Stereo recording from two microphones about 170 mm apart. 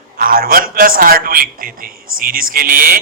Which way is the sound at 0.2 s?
60° right (ahead or behind).